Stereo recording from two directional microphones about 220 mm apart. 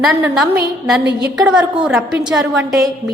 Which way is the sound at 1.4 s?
5° right (ahead or behind).